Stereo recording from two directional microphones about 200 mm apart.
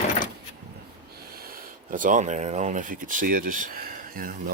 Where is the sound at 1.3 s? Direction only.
45° right (ahead or behind).